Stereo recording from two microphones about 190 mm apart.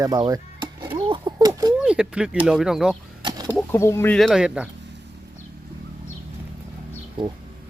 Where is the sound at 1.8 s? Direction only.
5° right (ahead or behind).